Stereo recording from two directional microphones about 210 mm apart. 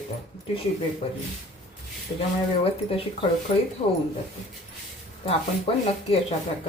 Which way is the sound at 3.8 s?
30° left (ahead or behind).